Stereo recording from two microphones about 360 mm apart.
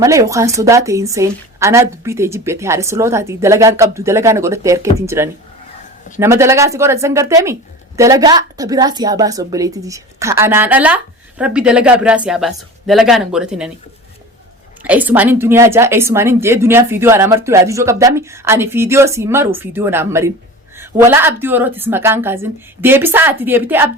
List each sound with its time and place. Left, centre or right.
0.0 s a woman's voice: centre
14.8 s a woman's voice: centre